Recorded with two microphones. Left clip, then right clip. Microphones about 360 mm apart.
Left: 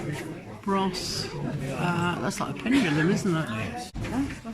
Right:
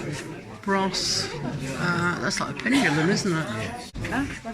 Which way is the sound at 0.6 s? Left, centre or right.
Centre.